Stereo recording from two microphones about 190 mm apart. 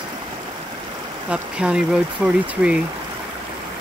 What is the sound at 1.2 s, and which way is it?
Speech, 5° right (ahead or behind).